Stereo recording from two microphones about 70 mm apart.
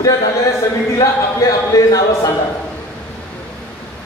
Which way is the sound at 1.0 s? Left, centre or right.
Left.